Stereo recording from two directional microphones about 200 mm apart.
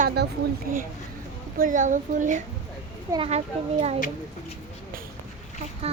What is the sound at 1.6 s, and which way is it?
Speech, 40° right (ahead or behind).